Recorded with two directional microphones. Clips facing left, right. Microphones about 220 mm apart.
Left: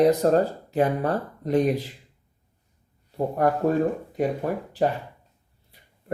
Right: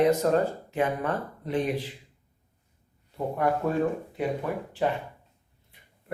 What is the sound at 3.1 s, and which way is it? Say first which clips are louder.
Speech: left 4 dB; 40° left (ahead or behind).